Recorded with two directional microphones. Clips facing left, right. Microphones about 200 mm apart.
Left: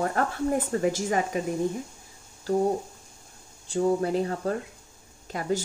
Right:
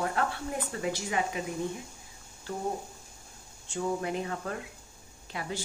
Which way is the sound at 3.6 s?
35° left (ahead or behind).